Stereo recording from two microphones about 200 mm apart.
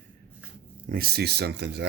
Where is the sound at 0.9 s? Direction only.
50° right (ahead or behind).